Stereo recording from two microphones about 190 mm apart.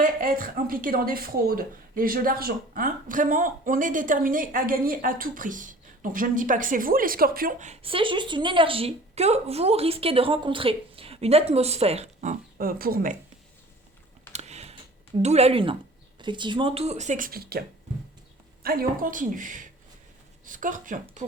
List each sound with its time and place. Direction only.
0.0 s speech: 45° right (ahead or behind)
14.3 s computer keyboard: 35° right (ahead or behind)
15.2 s speech: 35° right (ahead or behind); by 17.6 s 50° right (ahead or behind)
18.6 s speech: 50° right (ahead or behind)